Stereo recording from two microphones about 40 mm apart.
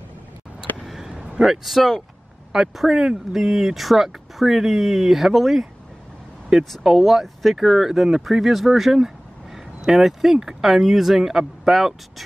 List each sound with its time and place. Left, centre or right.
0.8 s a sound: centre
1.1 s vehicle: right
1.4 s speech: centre